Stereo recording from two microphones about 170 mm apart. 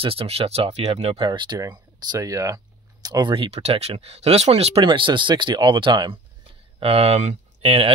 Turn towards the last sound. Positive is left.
turn(degrees=-35)  # may be behind; listen again after turning